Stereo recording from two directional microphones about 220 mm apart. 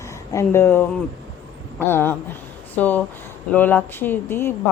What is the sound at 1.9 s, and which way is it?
Speech, 10° left (ahead or behind).